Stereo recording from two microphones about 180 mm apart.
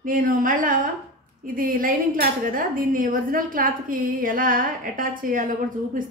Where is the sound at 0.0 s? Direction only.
50° right (ahead or behind).